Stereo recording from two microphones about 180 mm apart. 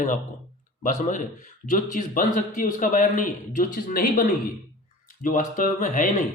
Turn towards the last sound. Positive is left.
turn(degrees=45)  # may be behind; listen again after turning